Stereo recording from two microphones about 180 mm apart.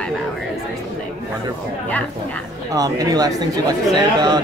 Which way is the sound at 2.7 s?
20° right (ahead or behind).